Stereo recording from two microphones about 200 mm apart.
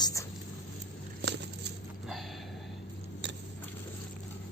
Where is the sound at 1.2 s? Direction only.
60° right (ahead or behind).